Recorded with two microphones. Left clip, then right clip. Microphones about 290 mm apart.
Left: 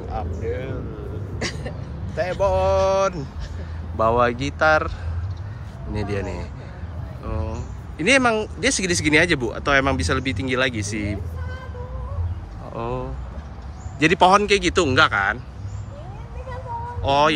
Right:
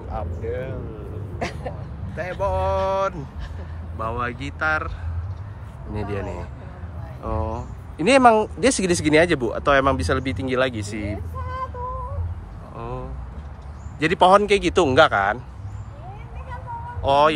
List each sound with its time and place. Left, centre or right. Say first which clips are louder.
0.1 s speech: even; centre
1.4 s throat clearing: even; right
2.1 s speech: left 4 dB; centre
5.9 s speech: left 2 dB; centre
12.7 s a man's voice: left 5 dB; centre
17.0 s speech: right 1 dB; centre